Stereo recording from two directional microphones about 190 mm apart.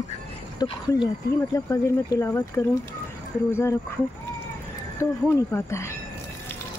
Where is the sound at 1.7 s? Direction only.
15° left (ahead or behind).